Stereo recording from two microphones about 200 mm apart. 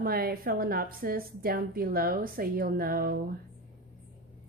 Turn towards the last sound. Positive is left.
turn(degrees=-50)  # may be behind; listen again after turning